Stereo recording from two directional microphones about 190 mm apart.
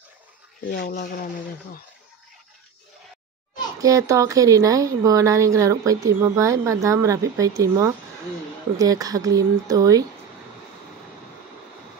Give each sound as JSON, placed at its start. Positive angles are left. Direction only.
{"t": 0.9, "sound": "speech", "side_deg": 55}
{"t": 3.8, "sound": "a woman's voice", "side_deg": -15}